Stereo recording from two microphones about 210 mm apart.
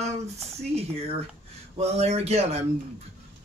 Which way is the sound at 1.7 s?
30° right (ahead or behind).